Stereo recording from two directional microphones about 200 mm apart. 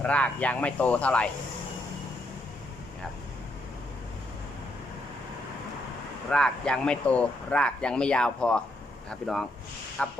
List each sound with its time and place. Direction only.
0.0 s speech: 5° left (ahead or behind)
6.3 s speech: 5° left (ahead or behind)